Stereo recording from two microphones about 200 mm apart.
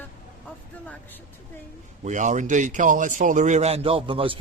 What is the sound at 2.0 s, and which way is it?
A man's voice, 35° right (ahead or behind).